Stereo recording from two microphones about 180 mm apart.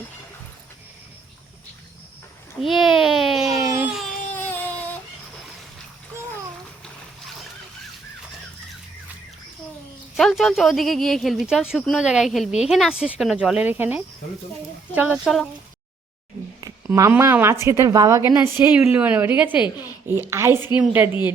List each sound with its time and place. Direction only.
2.6 s a sound: centre (ahead or behind)
3.6 s baby cry: 20° right (ahead or behind)
3.8 s baby cry: centre (ahead or behind)
4.4 s baby cry: 10° left (ahead or behind)
10.2 s speech: centre (ahead or behind)
16.6 s a woman's voice: 20° right (ahead or behind)